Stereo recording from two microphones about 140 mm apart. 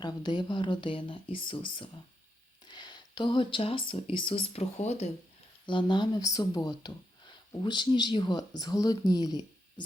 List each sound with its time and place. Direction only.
0.0 s speech: 30° left (ahead or behind); by 5.1 s 50° left (ahead or behind)
5.6 s speech: 35° left (ahead or behind)